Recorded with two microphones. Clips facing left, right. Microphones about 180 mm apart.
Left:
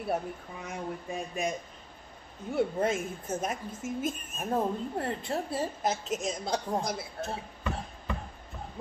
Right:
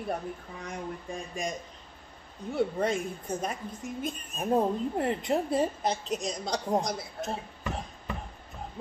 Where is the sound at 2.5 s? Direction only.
5° left (ahead or behind).